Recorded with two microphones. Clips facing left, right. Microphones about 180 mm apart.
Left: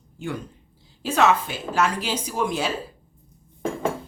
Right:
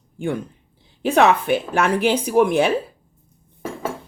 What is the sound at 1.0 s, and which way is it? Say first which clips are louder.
Cutlery: right 4 dB; 60° right (ahead or behind).